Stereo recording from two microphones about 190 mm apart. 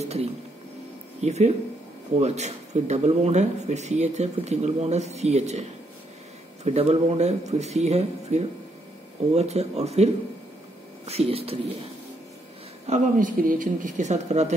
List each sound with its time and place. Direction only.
0.0 s music: 35° right (ahead or behind)
1.2 s speech: 35° right (ahead or behind)
11.1 s speech: 30° right (ahead or behind)
12.8 s speech: 40° right (ahead or behind)